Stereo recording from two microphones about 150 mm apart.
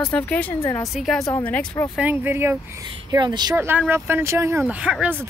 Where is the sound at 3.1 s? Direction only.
30° right (ahead or behind).